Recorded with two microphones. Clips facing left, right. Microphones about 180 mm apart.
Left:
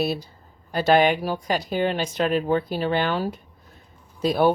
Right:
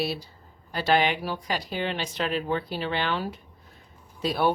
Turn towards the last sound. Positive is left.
turn(degrees=45)  # may be behind; listen again after turning